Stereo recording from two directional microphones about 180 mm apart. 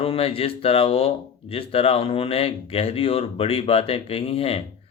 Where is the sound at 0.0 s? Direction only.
30° left (ahead or behind).